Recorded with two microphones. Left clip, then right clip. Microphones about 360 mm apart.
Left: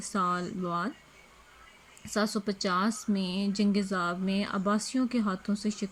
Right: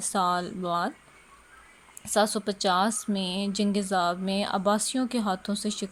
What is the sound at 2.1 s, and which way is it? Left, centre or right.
Speech, centre.